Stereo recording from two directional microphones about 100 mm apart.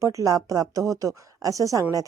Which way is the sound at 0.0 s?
30° right (ahead or behind).